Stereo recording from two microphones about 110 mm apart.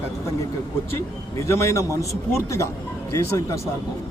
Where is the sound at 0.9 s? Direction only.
25° left (ahead or behind).